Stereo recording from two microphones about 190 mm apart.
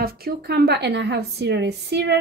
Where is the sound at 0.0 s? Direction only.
55° right (ahead or behind).